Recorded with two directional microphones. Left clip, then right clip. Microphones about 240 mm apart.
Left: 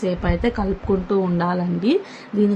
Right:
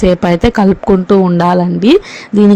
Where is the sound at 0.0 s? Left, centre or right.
Right.